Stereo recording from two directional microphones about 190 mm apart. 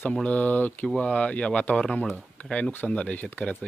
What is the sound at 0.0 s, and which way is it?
Speech, 5° left (ahead or behind).